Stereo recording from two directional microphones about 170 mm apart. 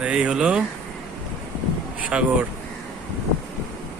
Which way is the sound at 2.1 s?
10° right (ahead or behind).